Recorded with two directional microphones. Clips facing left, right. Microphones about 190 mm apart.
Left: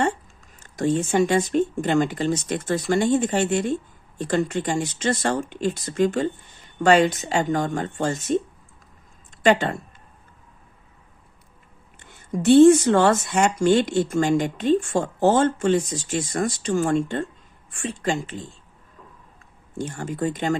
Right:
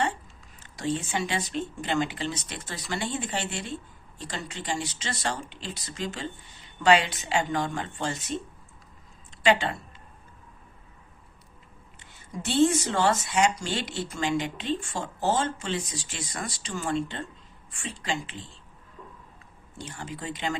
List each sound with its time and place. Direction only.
0.0 s speech: 45° left (ahead or behind)
9.4 s speech: 50° left (ahead or behind)
11.9 s speech: 50° left (ahead or behind)
19.8 s speech: 50° left (ahead or behind)